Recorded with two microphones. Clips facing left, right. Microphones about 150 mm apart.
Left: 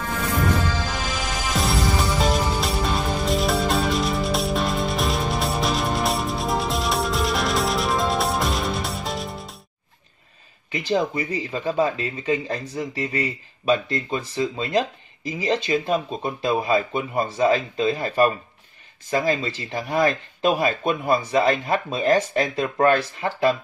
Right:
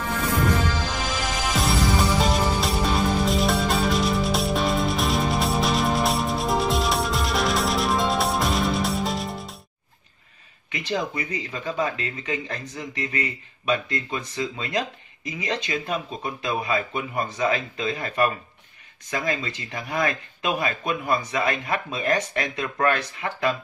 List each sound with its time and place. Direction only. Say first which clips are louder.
0.8 s music: even; centre (ahead or behind)
10.7 s speech: left 5 dB; 30° left (ahead or behind)